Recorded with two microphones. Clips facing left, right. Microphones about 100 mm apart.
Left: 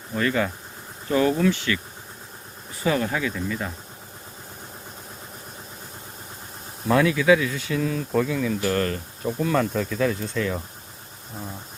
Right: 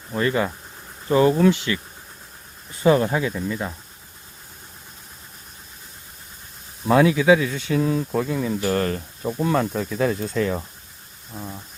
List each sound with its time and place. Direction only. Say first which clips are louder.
0.1 s speech: right 2 dB; 25° right (ahead or behind)
2.8 s speech: right 5 dB; 30° right (ahead or behind)
6.8 s speech: right 3 dB; 25° right (ahead or behind)
8.1 s speech: left 1 dB; 10° right (ahead or behind)
8.4 s speech: right 1 dB; 25° right (ahead or behind)
10.0 s speech: right 4 dB; 35° right (ahead or behind)